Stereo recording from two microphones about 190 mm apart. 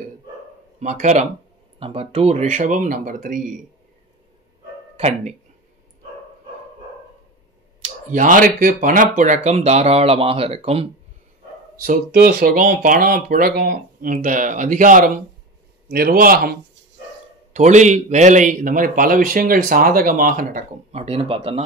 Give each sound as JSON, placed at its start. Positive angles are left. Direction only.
{"t": 0.7, "sound": "speech", "side_deg": -40}
{"t": 4.9, "sound": "speech", "side_deg": -35}
{"t": 7.8, "sound": "speech", "side_deg": -40}
{"t": 11.8, "sound": "a man's voice", "side_deg": -50}
{"t": 17.5, "sound": "a man's voice", "side_deg": -40}